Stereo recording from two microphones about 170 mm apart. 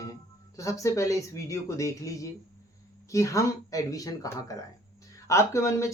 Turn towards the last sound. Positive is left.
turn(degrees=15)  # may be behind; listen again after turning